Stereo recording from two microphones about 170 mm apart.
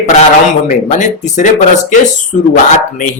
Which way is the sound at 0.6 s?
45° left (ahead or behind).